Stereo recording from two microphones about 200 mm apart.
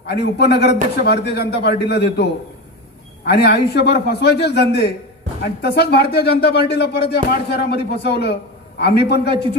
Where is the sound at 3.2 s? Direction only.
55° left (ahead or behind).